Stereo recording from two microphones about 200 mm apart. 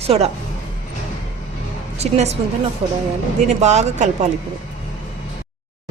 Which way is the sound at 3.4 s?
35° right (ahead or behind).